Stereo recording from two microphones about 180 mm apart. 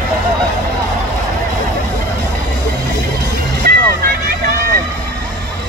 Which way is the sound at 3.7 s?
55° right (ahead or behind).